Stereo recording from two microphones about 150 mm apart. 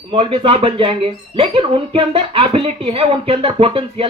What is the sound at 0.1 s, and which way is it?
Speech, 35° right (ahead or behind).